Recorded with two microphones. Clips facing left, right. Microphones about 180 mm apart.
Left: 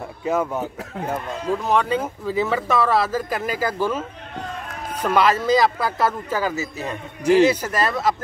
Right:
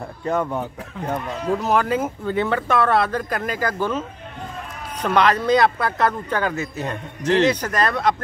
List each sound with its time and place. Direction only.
0.2 s speech: 5° left (ahead or behind)
5.0 s speech: 5° left (ahead or behind)